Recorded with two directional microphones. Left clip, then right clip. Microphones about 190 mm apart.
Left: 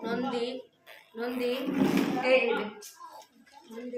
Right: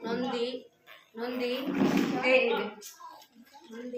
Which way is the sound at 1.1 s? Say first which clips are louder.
Left 1 dB; 20° left (ahead or behind).